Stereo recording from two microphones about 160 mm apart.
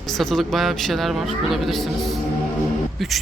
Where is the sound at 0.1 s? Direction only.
Centre (ahead or behind).